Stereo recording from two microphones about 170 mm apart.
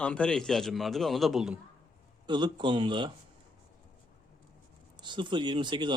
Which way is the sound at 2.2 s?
25° right (ahead or behind).